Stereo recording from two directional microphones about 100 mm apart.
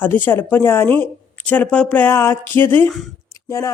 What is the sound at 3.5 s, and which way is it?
Speech, 35° left (ahead or behind).